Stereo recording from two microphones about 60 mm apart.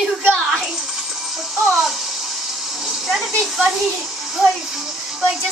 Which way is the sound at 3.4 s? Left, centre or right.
Centre.